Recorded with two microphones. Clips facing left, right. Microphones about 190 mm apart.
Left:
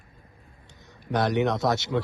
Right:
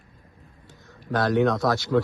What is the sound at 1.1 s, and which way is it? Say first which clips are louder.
Speech: right 2 dB; 20° left (ahead or behind).